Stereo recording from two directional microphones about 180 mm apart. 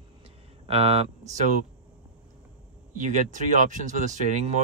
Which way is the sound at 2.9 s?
45° right (ahead or behind).